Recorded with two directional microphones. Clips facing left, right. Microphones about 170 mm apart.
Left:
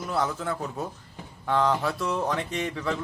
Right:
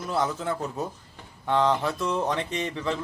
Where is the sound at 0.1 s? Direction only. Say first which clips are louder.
Right 1 dB; 20° right (ahead or behind).